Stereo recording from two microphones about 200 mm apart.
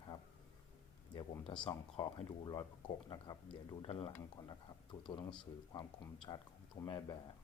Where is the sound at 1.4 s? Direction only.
25° left (ahead or behind).